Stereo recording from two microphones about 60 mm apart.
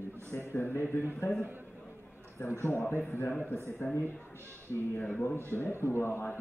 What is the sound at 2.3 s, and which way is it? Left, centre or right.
A man's voice, left.